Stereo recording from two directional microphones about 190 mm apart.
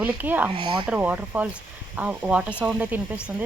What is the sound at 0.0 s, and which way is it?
Speech, 10° right (ahead or behind).